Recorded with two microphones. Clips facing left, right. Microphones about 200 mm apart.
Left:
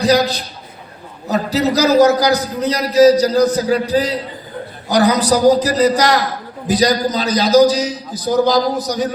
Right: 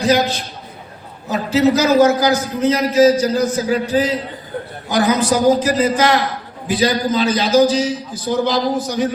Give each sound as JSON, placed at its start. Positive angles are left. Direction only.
{"t": 0.0, "sound": "a man's voice", "side_deg": 35}